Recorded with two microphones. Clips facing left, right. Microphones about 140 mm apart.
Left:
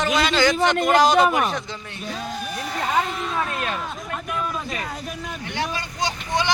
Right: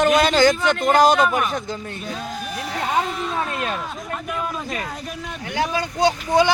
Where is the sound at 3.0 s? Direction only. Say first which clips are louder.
Right 1 dB; centre (ahead or behind).